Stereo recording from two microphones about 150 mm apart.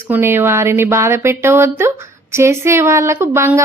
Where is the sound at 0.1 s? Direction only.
15° right (ahead or behind).